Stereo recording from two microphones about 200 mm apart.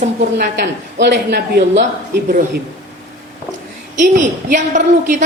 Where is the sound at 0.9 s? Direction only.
55° right (ahead or behind).